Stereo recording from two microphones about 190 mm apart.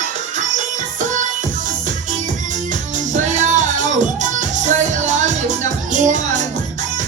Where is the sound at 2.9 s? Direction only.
40° right (ahead or behind).